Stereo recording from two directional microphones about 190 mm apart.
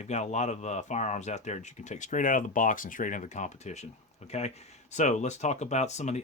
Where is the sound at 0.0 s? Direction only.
35° left (ahead or behind).